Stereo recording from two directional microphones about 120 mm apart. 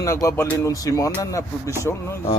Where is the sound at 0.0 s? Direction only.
25° left (ahead or behind).